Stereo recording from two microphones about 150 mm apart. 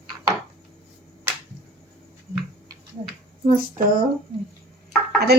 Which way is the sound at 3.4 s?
70° right (ahead or behind).